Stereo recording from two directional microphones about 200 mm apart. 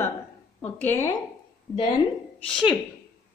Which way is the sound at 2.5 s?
5° left (ahead or behind).